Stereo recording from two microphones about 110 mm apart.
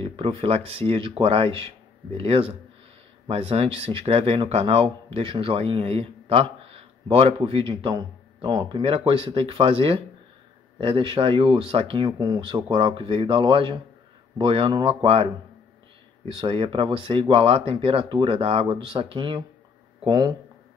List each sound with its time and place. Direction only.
0.0 s speech: 55° right (ahead or behind)
16.3 s speech: 55° right (ahead or behind)
20.1 s speech: 35° right (ahead or behind)